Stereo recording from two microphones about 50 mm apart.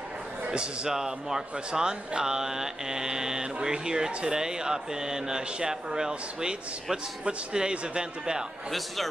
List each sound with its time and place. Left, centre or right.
0.5 s speech: centre
8.6 s a man's voice: centre